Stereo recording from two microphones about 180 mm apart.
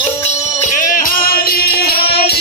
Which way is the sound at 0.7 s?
50° left (ahead or behind).